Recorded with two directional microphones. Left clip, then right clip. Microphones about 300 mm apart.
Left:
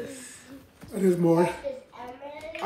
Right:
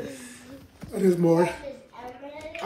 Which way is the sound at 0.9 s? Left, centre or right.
Centre.